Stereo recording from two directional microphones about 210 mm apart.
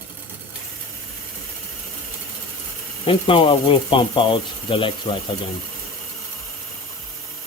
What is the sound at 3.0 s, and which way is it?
Speech, 25° left (ahead or behind).